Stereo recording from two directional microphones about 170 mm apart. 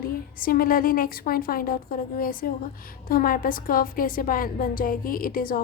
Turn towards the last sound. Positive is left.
turn(degrees=55)  # may be behind; listen again after turning